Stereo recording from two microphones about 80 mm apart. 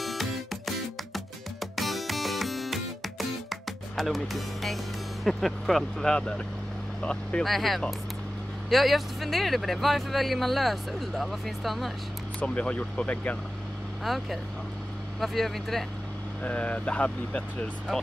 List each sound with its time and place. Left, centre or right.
0.0 s music: centre
5.2 s speech: centre
7.4 s speech: centre
12.4 s speech: centre
14.0 s speech: centre
16.4 s speech: centre